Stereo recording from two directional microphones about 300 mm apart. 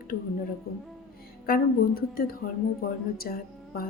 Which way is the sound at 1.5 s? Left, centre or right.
Left.